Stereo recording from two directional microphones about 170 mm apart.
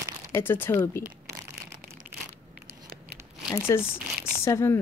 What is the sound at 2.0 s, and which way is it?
Crushing, 10° right (ahead or behind).